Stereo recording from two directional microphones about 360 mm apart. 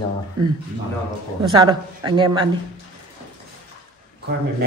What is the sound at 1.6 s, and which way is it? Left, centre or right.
Speech, centre.